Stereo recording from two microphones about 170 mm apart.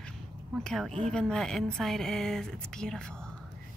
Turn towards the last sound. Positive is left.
turn(degrees=5)  # may be behind; listen again after turning